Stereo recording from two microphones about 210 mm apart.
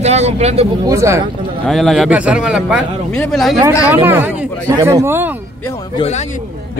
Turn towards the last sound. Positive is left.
turn(degrees=30)  # may be behind; listen again after turning